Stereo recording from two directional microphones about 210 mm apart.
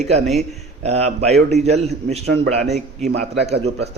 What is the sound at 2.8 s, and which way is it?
Speech, 35° right (ahead or behind).